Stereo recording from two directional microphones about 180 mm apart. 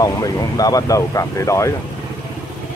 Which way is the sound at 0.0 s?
20° left (ahead or behind).